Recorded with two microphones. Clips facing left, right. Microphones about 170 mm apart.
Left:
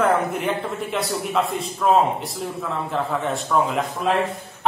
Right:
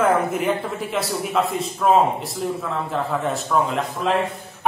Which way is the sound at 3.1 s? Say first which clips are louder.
Right 1 dB; centre (ahead or behind).